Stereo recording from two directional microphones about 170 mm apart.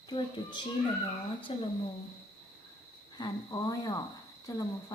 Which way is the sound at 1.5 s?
30° left (ahead or behind).